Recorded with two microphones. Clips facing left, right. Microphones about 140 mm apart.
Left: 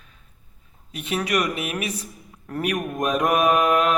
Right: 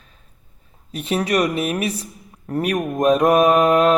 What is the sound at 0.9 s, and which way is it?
Mantra, 35° right (ahead or behind).